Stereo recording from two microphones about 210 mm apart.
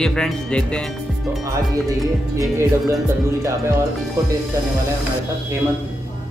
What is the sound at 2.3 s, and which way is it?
Speech, 15° right (ahead or behind).